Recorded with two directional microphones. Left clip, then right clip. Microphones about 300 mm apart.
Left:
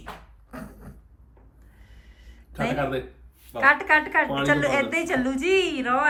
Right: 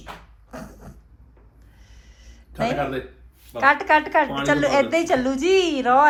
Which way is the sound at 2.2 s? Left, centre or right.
Centre.